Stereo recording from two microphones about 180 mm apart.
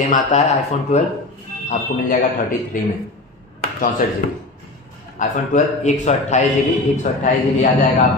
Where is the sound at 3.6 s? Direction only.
50° left (ahead or behind).